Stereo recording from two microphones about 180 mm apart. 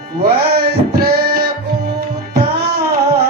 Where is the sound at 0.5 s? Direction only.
60° right (ahead or behind).